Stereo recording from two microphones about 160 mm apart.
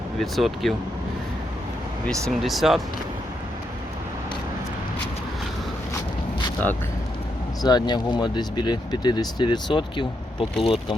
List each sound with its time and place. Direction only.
0.2 s speech: centre (ahead or behind)
2.3 s speech: centre (ahead or behind)
7.6 s speech: 25° left (ahead or behind)